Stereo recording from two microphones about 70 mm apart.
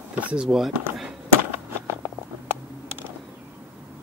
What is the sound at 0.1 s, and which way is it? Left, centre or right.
Speech, right.